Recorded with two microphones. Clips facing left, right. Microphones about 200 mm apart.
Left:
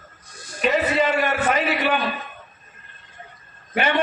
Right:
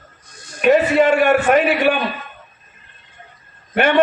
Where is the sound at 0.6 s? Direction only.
50° right (ahead or behind).